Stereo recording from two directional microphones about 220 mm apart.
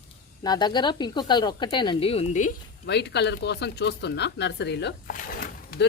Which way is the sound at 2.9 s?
50° left (ahead or behind).